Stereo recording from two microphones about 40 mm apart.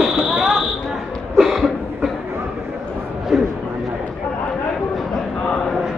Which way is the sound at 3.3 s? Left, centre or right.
Centre.